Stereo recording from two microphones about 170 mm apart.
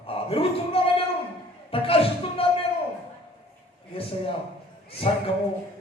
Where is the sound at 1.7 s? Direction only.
35° left (ahead or behind).